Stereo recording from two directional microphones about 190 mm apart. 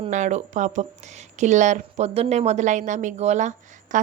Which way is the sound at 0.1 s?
40° right (ahead or behind).